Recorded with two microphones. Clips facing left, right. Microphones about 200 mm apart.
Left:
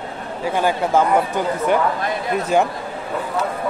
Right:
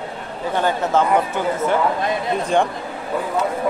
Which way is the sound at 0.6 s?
10° left (ahead or behind).